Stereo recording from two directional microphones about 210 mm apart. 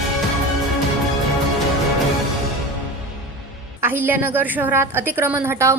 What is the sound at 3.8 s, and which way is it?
A woman's voice, 10° right (ahead or behind).